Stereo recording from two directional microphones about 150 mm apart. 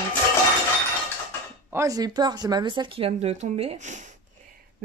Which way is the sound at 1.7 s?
20° right (ahead or behind).